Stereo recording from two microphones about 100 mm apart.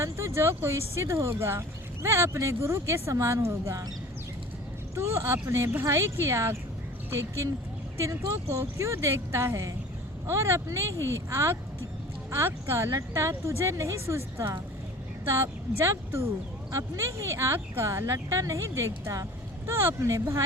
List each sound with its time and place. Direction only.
0.0 s speech: 30° right (ahead or behind)
4.9 s speech: 25° right (ahead or behind)